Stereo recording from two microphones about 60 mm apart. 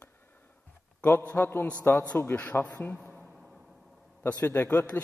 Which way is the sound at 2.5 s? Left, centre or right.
Left.